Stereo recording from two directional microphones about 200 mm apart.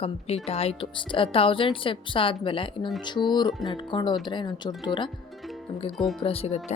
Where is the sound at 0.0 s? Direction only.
30° left (ahead or behind).